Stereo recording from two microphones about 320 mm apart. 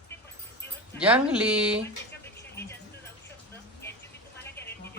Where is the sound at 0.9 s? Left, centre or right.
Centre.